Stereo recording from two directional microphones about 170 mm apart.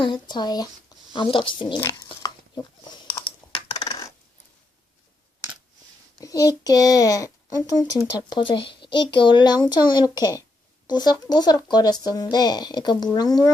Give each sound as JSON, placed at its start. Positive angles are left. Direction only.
{"t": 0.0, "sound": "speech", "side_deg": 25}
{"t": 1.8, "sound": "a sound", "side_deg": 20}
{"t": 3.5, "sound": "computer keyboard", "side_deg": 35}
{"t": 6.1, "sound": "a child's voice", "side_deg": 20}